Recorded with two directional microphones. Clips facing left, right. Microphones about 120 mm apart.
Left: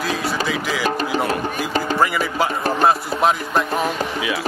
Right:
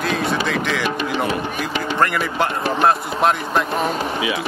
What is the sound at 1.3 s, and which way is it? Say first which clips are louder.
Speech: left 1 dB; 40° left (ahead or behind).